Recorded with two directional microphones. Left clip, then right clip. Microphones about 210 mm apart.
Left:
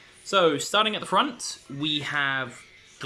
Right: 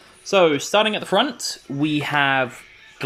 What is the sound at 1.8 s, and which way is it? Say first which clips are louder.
Speech: right 6 dB; 5° left (ahead or behind).